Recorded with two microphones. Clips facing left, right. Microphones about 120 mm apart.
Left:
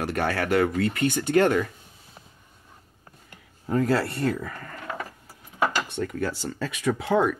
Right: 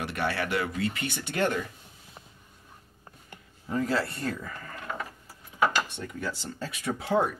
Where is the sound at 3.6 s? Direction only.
60° left (ahead or behind).